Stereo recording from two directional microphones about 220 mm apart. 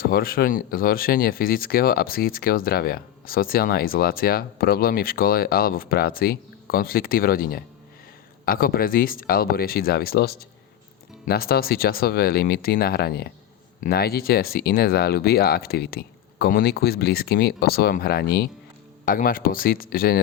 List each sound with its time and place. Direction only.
0.0 s speech: 40° left (ahead or behind)